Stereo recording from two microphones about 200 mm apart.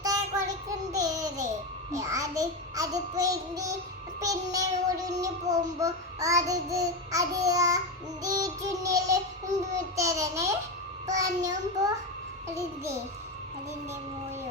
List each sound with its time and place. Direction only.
0.0 s child singing: 15° right (ahead or behind)